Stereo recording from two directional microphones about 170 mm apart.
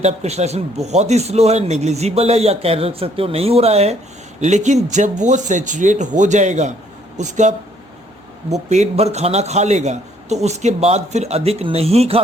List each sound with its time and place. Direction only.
0.0 s speech: 40° right (ahead or behind)
8.5 s speech: 40° right (ahead or behind)